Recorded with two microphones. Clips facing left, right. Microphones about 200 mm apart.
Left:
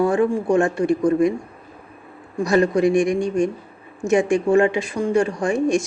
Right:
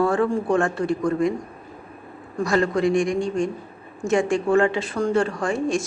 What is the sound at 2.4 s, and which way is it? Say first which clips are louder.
A woman's voice: left 3 dB; 20° left (ahead or behind).